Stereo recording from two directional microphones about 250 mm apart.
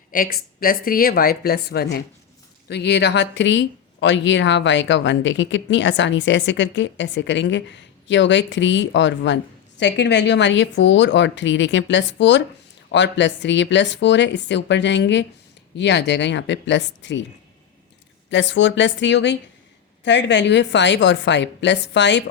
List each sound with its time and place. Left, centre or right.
0.1 s a woman's voice: left
18.3 s speech: left